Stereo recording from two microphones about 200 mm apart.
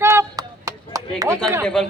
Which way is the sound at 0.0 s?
15° right (ahead or behind).